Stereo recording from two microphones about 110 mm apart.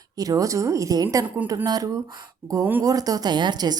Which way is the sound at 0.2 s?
35° right (ahead or behind).